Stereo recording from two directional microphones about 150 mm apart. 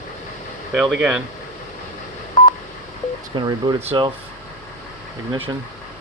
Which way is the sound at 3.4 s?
30° right (ahead or behind).